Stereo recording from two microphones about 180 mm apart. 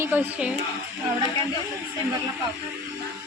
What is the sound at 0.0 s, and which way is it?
Speech, 10° right (ahead or behind).